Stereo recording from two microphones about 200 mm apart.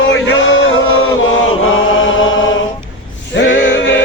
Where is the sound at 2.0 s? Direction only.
75° left (ahead or behind).